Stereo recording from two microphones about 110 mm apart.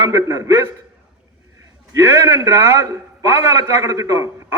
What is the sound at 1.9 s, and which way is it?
A man's voice, 25° right (ahead or behind).